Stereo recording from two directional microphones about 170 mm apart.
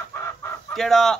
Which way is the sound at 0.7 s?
Centre (ahead or behind).